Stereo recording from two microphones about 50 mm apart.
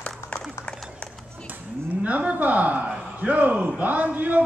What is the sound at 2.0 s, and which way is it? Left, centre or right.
A man's voice, right.